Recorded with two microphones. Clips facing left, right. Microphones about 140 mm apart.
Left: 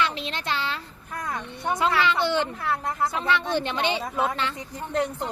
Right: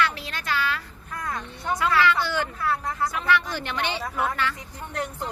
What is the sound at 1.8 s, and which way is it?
Speech, 20° left (ahead or behind).